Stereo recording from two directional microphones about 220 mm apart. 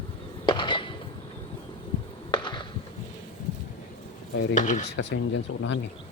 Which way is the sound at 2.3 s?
20° left (ahead or behind).